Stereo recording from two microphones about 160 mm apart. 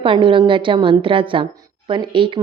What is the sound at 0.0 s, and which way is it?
A woman's voice, 30° right (ahead or behind).